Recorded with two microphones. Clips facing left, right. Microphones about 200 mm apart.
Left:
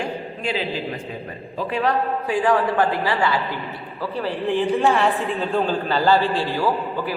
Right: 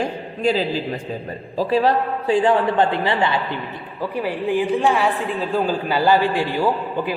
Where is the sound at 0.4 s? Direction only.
40° right (ahead or behind); by 4.6 s 15° right (ahead or behind).